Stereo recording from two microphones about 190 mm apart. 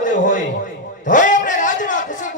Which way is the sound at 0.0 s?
40° left (ahead or behind).